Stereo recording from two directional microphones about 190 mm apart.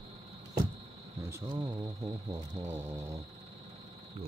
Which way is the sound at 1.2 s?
15° right (ahead or behind).